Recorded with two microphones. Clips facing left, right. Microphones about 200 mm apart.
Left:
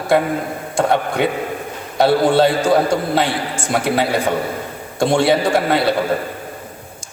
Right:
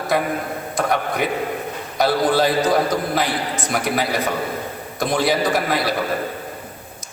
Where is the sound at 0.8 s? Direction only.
30° left (ahead or behind).